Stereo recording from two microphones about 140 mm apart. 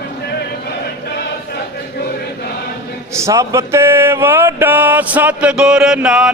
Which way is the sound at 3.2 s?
20° right (ahead or behind).